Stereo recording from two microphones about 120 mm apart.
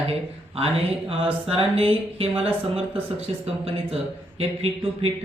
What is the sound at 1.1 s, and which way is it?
A man's voice, 50° right (ahead or behind).